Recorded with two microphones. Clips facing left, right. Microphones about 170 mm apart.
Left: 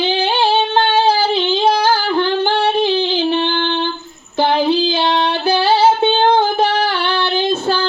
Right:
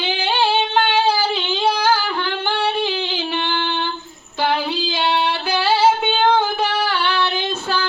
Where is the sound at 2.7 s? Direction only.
35° left (ahead or behind).